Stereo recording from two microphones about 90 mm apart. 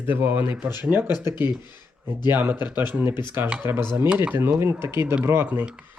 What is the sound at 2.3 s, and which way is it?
Speech, 20° right (ahead or behind).